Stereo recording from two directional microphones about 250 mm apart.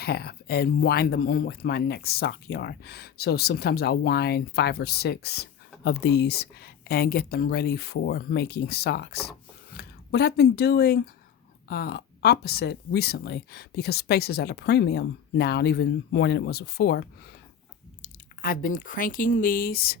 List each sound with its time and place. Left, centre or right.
0.0 s speech: left